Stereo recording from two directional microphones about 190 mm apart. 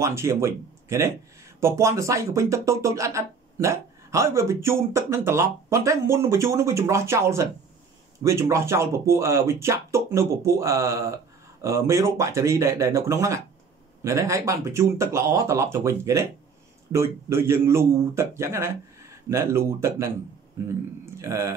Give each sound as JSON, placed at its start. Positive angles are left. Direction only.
{"t": 0.0, "sound": "speech", "side_deg": -15}